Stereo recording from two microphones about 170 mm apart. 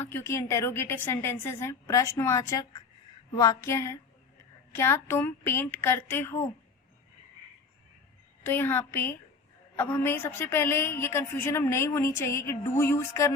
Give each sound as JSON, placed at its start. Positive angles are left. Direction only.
{"t": 0.0, "sound": "a woman's voice", "side_deg": 15}
{"t": 8.4, "sound": "a woman's voice", "side_deg": 10}